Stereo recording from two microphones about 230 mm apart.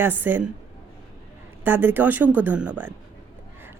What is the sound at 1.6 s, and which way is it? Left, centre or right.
A woman's voice, centre.